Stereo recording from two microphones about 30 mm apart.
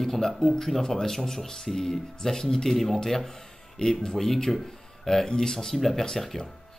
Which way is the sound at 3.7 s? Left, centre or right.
Left.